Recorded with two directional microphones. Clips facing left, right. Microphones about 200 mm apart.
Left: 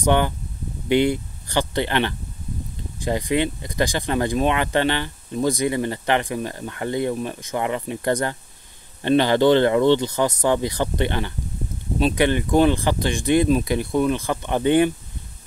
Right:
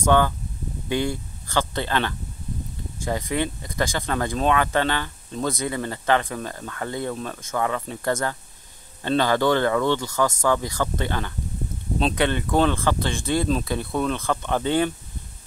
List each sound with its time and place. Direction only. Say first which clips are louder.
0.0 s speech: even; 20° left (ahead or behind)